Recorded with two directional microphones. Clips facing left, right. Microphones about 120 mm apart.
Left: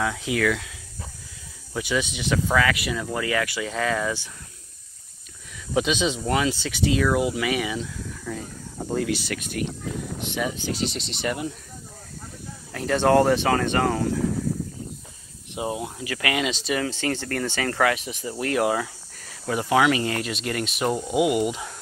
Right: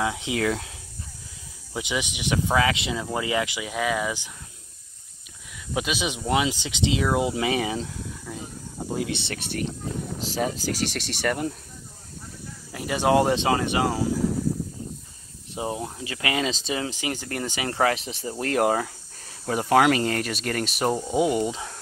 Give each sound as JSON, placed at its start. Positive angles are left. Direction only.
{"t": 0.0, "sound": "speech", "side_deg": -20}
{"t": 1.7, "sound": "speech", "side_deg": -20}
{"t": 5.8, "sound": "speech", "side_deg": -10}
{"t": 12.7, "sound": "speech", "side_deg": -10}
{"t": 15.6, "sound": "speech", "side_deg": 15}
{"t": 16.0, "sound": "speech", "side_deg": -25}
{"t": 16.9, "sound": "speech", "side_deg": -15}
{"t": 17.7, "sound": "speech", "side_deg": -35}
{"t": 20.9, "sound": "speech", "side_deg": 5}